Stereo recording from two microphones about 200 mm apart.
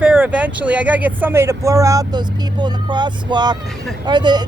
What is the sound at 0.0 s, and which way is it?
Speech, 5° right (ahead or behind).